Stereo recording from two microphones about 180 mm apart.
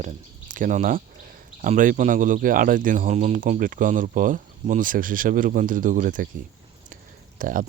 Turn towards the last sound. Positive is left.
turn(degrees=-50)  # may be behind; listen again after turning